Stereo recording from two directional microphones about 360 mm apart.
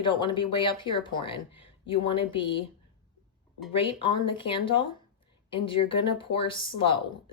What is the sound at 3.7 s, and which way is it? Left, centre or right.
A woman's voice, centre.